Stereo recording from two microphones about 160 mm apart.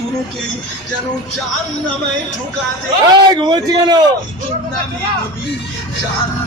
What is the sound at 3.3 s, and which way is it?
Speech, 30° right (ahead or behind).